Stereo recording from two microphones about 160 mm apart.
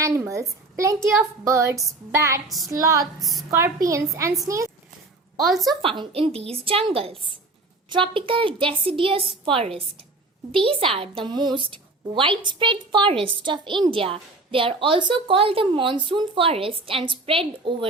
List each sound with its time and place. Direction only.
0.0 s a woman's voice: 20° right (ahead or behind)
3.2 s a woman's voice: centre (ahead or behind)
3.5 s a woman's voice: 20° right (ahead or behind)
5.8 s a woman's voice: 35° right (ahead or behind)